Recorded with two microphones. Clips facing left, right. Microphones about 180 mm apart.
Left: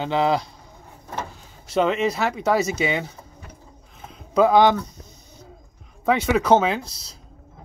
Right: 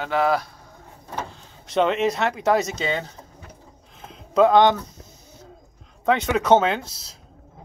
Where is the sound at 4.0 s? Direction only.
Centre (ahead or behind).